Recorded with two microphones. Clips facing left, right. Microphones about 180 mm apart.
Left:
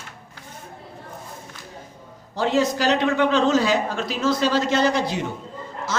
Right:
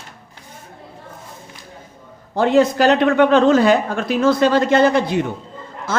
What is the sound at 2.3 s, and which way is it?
Speech, 55° right (ahead or behind).